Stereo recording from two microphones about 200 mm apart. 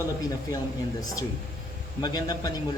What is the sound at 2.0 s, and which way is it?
Speech, 20° left (ahead or behind).